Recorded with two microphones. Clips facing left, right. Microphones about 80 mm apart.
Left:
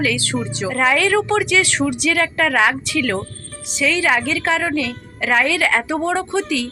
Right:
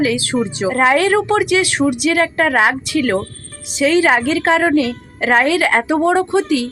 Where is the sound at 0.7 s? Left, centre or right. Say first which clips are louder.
Right 3 dB; right.